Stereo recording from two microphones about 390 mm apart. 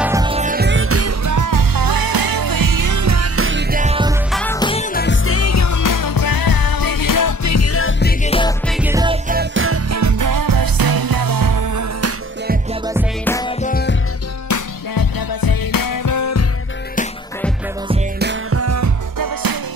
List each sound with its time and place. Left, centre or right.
0.0 s music: centre
4.3 s music: centre
5.0 s music: left
8.2 s music: centre
8.6 s music: centre; by 12.1 s right
13.2 s music: centre
14.5 s music: left
18.2 s music: right